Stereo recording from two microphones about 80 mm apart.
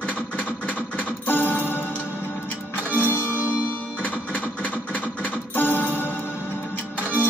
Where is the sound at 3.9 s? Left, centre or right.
Centre.